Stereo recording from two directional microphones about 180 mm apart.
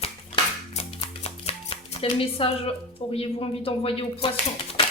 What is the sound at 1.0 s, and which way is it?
Chopping, 35° left (ahead or behind).